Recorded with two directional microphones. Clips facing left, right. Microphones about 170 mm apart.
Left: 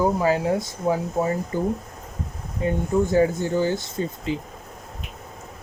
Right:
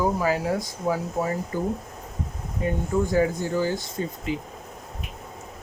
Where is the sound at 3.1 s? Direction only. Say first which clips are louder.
Left 3 dB; 25° left (ahead or behind).